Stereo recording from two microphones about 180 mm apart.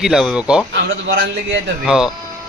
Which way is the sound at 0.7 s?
90° right.